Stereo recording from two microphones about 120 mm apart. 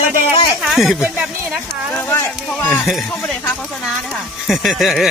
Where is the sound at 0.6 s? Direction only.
Centre (ahead or behind).